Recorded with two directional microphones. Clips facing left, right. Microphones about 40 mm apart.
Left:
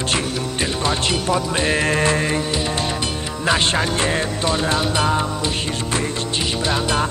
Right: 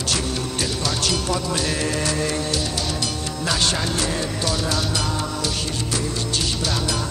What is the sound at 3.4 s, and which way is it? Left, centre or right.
Music, left.